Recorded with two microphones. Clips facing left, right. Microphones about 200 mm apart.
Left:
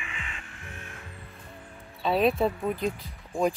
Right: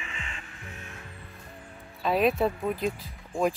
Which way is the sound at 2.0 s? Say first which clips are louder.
Even; centre (ahead or behind).